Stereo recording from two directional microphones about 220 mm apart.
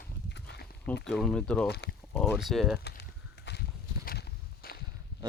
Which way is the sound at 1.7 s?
50° left (ahead or behind).